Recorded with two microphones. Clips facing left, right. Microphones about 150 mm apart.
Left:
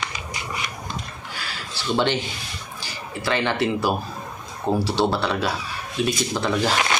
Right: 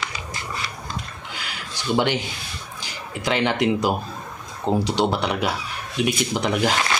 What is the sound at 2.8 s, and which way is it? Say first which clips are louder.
Speech: right 1 dB; 15° right (ahead or behind).